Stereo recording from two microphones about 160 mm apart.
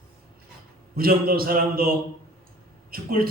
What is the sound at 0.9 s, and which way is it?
Speech, 70° right (ahead or behind).